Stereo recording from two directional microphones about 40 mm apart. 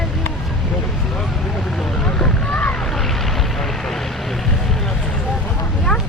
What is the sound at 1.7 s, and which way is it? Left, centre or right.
Vehicle, centre.